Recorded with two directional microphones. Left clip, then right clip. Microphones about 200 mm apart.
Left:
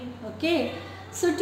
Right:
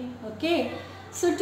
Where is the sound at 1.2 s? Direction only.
5° right (ahead or behind).